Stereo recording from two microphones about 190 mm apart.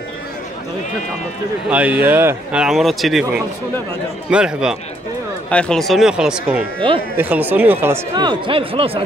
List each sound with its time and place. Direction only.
1.7 s a man's voice: 10° right (ahead or behind)
4.3 s a man's voice: 5° right (ahead or behind)
8.2 s speech: 25° right (ahead or behind)